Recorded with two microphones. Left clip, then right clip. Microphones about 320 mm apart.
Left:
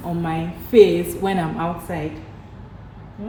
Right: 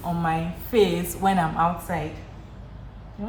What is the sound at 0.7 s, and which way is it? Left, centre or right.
A woman's voice, right.